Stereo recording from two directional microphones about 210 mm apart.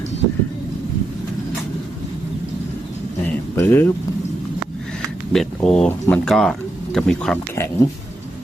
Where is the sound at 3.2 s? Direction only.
10° left (ahead or behind).